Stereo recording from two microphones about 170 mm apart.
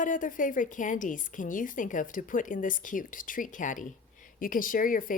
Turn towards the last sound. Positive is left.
turn(degrees=55)  # may be behind; listen again after turning